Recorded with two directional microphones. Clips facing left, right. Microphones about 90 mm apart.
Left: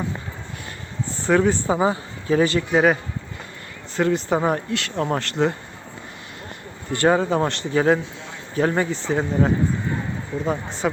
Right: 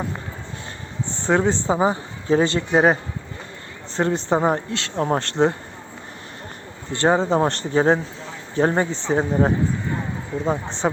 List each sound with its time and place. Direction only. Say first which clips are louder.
1.1 s a man's voice: left 1 dB; 25° right (ahead or behind)
6.9 s speech: even; 25° right (ahead or behind)
7.4 s a man's voice: right 1 dB; 35° right (ahead or behind)
10.3 s speech: right 1 dB; 5° left (ahead or behind)
10.8 s speech: right 1 dB; 25° right (ahead or behind)